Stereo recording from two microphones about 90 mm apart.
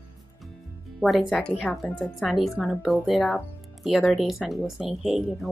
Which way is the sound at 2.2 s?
Centre (ahead or behind).